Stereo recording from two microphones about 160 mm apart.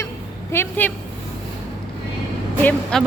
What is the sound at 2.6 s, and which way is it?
Speech, 5° left (ahead or behind).